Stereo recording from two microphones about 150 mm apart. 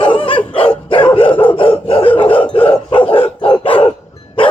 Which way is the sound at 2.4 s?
40° left (ahead or behind).